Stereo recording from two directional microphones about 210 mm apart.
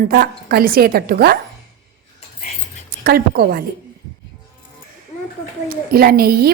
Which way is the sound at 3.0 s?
45° right (ahead or behind).